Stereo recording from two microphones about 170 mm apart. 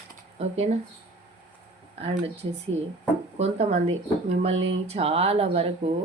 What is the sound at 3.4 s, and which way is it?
A woman's voice, 40° right (ahead or behind).